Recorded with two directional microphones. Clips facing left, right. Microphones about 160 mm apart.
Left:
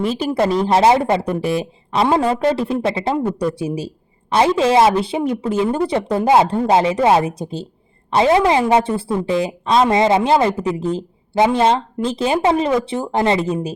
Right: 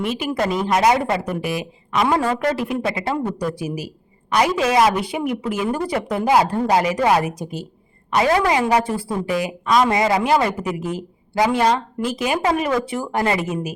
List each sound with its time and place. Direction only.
0.1 s a woman's voice: 30° left (ahead or behind)